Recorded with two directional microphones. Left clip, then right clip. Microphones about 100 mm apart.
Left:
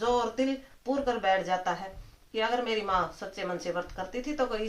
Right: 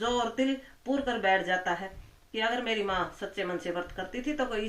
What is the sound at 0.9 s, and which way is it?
Speech, 30° left (ahead or behind).